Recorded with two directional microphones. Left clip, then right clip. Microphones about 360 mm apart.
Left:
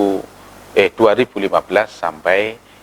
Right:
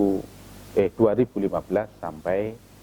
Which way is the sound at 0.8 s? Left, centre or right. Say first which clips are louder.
Left 8 dB; centre.